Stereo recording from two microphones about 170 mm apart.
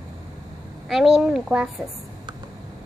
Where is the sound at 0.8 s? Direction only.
Centre (ahead or behind).